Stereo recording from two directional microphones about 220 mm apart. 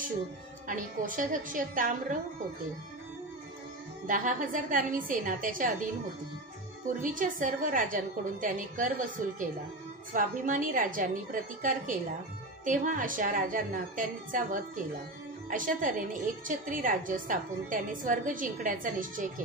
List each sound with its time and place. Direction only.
0.7 s a woman's voice: 35° right (ahead or behind)
4.1 s a woman's voice: 35° right (ahead or behind)
7.0 s a woman's voice: 35° right (ahead or behind)